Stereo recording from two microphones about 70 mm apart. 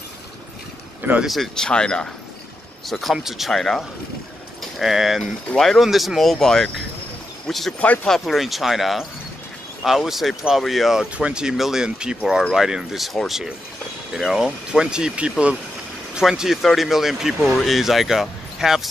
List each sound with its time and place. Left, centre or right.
1.2 s speech: centre
2.9 s speech: centre
7.8 s speech: left
8.1 s speech: centre
11.1 s speech: centre
16.2 s speech: centre